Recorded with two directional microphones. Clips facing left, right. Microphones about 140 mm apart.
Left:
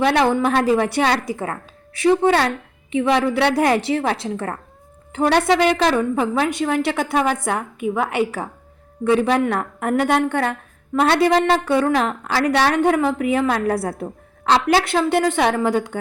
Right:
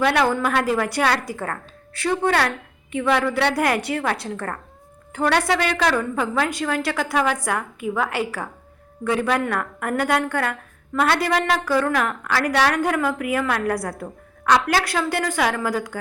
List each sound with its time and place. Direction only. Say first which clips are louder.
0.0 s a woman's voice: left 3 dB; 25° left (ahead or behind)